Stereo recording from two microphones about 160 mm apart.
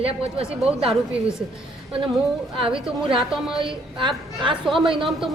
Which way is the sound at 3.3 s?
5° right (ahead or behind).